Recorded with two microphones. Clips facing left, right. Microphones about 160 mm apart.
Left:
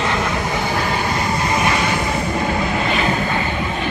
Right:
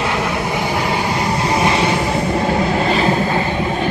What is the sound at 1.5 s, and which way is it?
Train, 30° right (ahead or behind).